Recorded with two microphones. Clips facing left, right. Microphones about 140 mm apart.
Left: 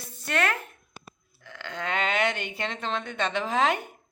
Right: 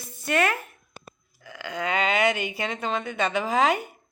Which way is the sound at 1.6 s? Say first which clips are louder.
Right 3 dB; 5° right (ahead or behind).